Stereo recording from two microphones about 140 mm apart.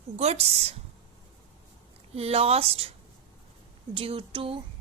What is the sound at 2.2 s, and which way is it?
Speech, 45° right (ahead or behind).